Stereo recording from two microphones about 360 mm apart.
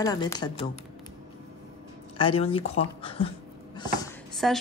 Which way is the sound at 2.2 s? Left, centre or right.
Centre.